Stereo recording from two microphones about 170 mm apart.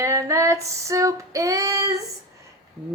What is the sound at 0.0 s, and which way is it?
Female singing, 15° right (ahead or behind).